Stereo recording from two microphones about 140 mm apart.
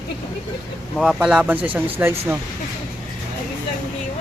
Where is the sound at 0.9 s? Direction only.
5° right (ahead or behind).